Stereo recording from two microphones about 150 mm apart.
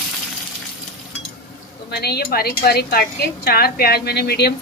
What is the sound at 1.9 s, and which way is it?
A woman's voice, 90° left.